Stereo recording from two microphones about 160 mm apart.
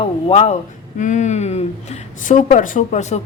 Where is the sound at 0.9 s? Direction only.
50° left (ahead or behind).